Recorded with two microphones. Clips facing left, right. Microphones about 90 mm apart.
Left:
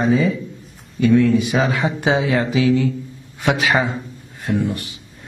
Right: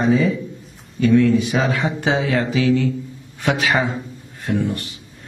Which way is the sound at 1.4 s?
10° left (ahead or behind).